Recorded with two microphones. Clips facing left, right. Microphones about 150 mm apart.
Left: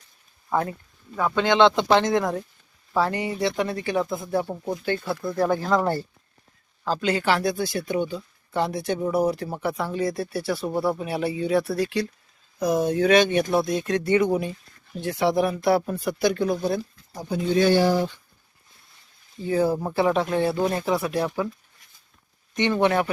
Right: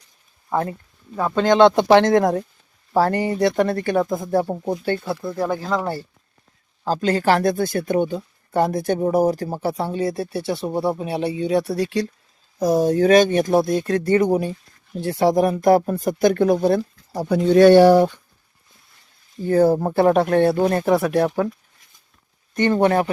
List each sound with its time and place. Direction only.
0.5 s speech: 25° right (ahead or behind); by 2.4 s 60° right (ahead or behind)
2.9 s speech: 40° right (ahead or behind)
3.4 s speech: 50° right (ahead or behind)
4.4 s speech: 25° right (ahead or behind)
6.8 s speech: 40° right (ahead or behind); by 18.2 s 60° right (ahead or behind)
19.4 s speech: 45° right (ahead or behind)
22.5 s speech: 45° right (ahead or behind)